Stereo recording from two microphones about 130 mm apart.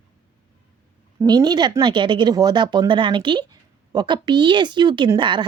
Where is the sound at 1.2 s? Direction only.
30° right (ahead or behind).